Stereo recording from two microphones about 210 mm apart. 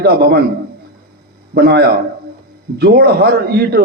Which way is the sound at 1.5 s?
50° right (ahead or behind).